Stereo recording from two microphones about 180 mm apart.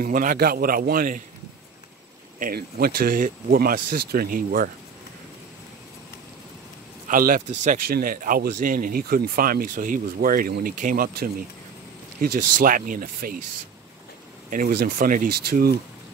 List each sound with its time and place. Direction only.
0.0 s speech: 50° right (ahead or behind)
2.3 s speech: 50° right (ahead or behind)
7.1 s speech: 50° right (ahead or behind)
14.5 s speech: 55° right (ahead or behind)